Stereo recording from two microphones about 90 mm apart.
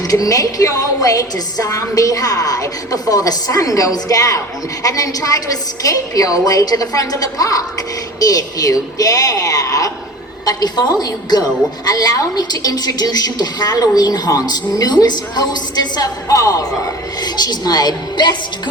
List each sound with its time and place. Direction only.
0.1 s a woman's voice: 40° left (ahead or behind)